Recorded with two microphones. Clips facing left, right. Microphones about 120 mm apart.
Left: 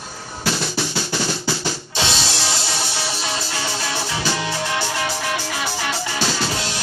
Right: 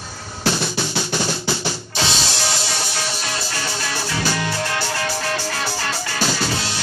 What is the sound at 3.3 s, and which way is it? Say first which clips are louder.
Music: left 1 dB; 20° left (ahead or behind).